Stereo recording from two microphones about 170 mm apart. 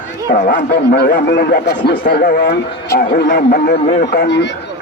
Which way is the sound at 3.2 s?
90° left.